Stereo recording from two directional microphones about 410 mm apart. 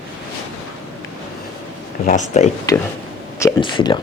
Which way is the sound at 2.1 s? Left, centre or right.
Centre.